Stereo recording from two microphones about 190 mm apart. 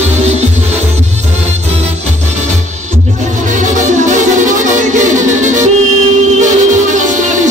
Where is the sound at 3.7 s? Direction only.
40° right (ahead or behind).